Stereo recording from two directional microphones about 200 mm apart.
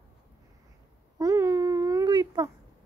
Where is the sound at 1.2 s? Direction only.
15° right (ahead or behind).